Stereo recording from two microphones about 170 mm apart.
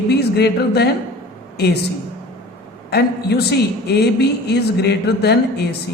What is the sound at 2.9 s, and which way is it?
A woman's voice, 75° left (ahead or behind).